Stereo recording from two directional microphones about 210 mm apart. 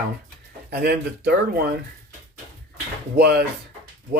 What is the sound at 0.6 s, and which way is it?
Speech, 50° right (ahead or behind).